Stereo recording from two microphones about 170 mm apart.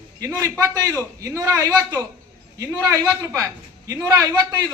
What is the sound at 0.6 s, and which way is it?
A man's voice, 20° right (ahead or behind).